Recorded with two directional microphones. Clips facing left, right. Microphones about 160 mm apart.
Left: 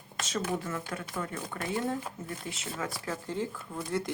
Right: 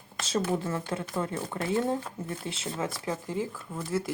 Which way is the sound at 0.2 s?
30° right (ahead or behind).